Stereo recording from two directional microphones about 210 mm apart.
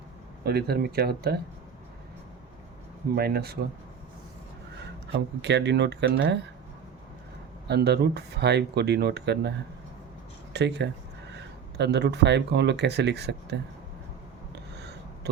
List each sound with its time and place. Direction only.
0.4 s speech: 50° right (ahead or behind)
3.2 s speech: 45° right (ahead or behind)
5.4 s speech: 55° right (ahead or behind)
7.7 s speech: 50° right (ahead or behind)
10.5 s speech: 55° right (ahead or behind)
14.8 s a sound: 55° right (ahead or behind)